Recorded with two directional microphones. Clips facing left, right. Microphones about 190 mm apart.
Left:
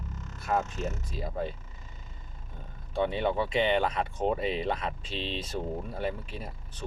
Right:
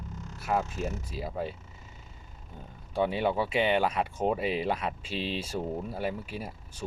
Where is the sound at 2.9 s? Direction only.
5° right (ahead or behind).